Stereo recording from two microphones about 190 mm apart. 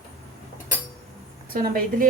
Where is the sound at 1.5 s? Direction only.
50° right (ahead or behind).